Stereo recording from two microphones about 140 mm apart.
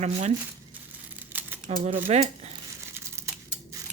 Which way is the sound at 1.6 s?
65° right (ahead or behind).